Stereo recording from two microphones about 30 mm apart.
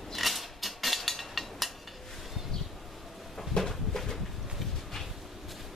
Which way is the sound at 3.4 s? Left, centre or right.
Centre.